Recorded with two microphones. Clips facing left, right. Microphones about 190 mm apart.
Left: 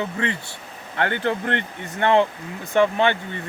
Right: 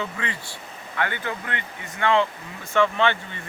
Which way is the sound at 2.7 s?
15° left (ahead or behind).